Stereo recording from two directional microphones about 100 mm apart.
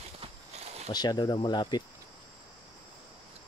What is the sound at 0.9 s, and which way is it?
Speech, 40° left (ahead or behind).